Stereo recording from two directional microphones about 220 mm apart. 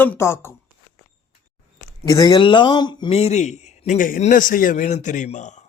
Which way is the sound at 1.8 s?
15° left (ahead or behind).